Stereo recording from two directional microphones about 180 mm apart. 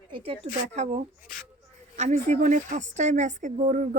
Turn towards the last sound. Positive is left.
turn(degrees=-45)  # may be behind; listen again after turning